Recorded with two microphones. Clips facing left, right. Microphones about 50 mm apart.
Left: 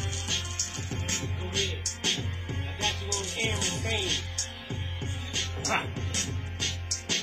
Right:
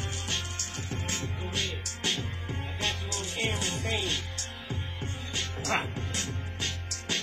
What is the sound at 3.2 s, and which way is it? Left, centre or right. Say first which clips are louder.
Music: even; centre.